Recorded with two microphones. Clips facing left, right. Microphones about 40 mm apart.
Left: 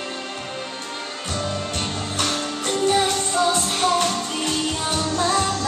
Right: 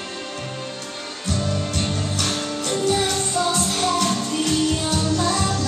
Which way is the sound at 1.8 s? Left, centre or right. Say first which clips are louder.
Right 1 dB; left.